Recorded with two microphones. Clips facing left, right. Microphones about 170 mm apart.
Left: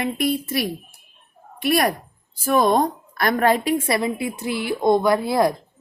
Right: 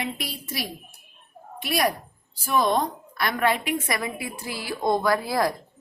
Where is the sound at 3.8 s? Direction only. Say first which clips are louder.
Left 7 dB; 25° left (ahead or behind).